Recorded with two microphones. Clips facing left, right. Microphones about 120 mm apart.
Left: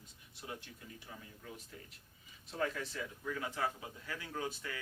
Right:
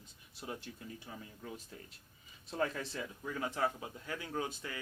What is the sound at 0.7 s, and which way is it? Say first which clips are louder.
Speech: right 4 dB; 40° right (ahead or behind).